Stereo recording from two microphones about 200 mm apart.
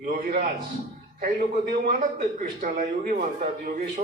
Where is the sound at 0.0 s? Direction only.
40° right (ahead or behind).